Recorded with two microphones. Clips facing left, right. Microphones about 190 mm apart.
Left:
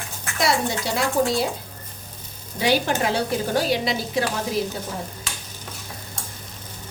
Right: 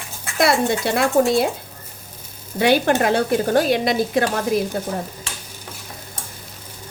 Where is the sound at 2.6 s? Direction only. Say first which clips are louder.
Right 5 dB; 55° right (ahead or behind).